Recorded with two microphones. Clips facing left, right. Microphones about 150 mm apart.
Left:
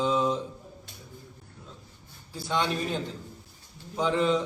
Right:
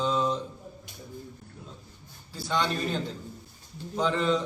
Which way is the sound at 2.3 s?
15° left (ahead or behind).